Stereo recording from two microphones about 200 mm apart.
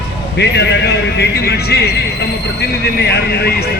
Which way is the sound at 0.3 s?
60° left (ahead or behind).